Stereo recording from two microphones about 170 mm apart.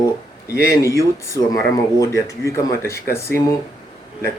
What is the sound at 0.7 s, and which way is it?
Speech, 20° left (ahead or behind).